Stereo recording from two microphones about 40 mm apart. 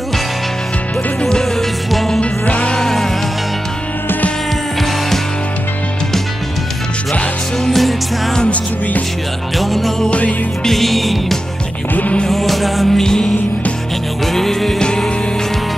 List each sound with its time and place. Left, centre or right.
1.4 s music: centre
2.4 s music: left
2.8 s music: centre
7.6 s music: centre
9.6 s music: centre
10.0 s music: left
10.6 s music: centre
12.9 s music: centre
14.8 s music: left